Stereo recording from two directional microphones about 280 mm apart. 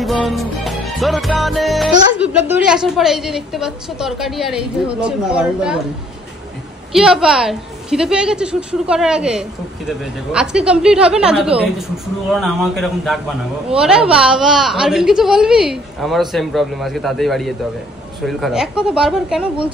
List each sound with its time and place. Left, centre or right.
0.0 s music: centre
6.9 s music: centre